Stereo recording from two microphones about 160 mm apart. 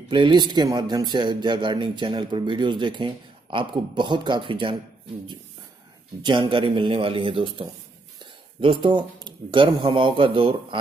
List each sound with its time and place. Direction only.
0.1 s speech: 30° right (ahead or behind)
6.2 s a man's voice: 30° right (ahead or behind)